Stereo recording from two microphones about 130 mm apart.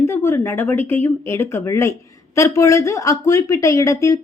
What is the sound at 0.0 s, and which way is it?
Speech, 20° left (ahead or behind).